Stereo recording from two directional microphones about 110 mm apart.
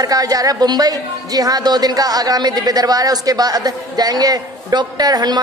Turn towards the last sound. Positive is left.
turn(degrees=-40)  # may be behind; listen again after turning